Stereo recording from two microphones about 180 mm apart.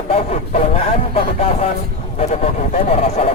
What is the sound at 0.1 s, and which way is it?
A man's voice, 35° left (ahead or behind).